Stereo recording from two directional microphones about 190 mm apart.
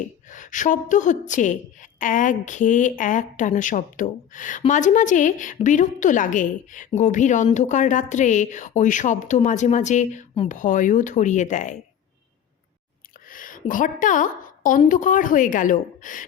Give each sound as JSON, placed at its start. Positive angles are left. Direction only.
{"t": 0.3, "sound": "a woman's voice", "side_deg": 40}
{"t": 13.3, "sound": "a woman's voice", "side_deg": 45}